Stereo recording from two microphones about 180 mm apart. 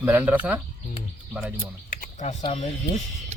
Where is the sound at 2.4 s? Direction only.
35° left (ahead or behind).